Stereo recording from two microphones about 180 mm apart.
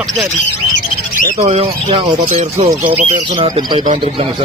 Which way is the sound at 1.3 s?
35° right (ahead or behind).